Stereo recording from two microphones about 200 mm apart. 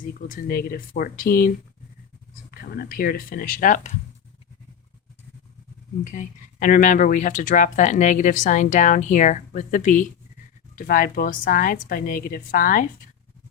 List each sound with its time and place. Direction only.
0.1 s a woman's voice: 45° left (ahead or behind)
6.1 s a woman's voice: 40° left (ahead or behind)